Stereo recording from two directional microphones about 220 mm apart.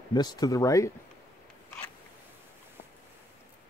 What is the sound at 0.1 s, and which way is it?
Speech, 20° left (ahead or behind).